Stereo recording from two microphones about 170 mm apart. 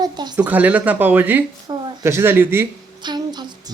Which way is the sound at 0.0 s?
25° right (ahead or behind).